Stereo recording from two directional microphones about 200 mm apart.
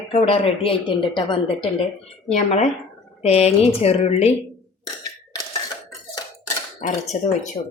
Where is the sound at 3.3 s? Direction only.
30° left (ahead or behind).